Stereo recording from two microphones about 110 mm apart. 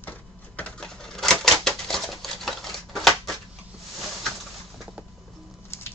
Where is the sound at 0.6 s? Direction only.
10° left (ahead or behind).